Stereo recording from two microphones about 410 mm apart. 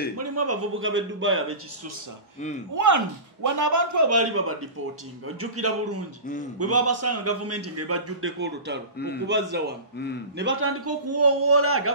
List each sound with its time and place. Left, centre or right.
0.2 s a man's voice: right
2.7 s a man's voice: right